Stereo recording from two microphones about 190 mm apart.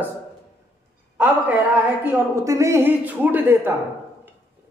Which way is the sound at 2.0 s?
15° right (ahead or behind).